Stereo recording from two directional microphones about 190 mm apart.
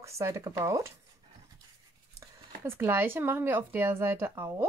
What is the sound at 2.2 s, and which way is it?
Speech, 15° right (ahead or behind).